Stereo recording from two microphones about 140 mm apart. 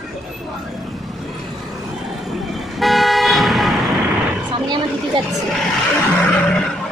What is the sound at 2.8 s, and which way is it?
Toot, centre (ahead or behind).